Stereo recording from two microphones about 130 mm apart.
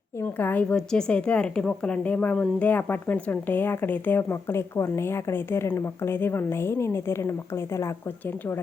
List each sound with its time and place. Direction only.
0.3 s a woman's voice: 15° left (ahead or behind)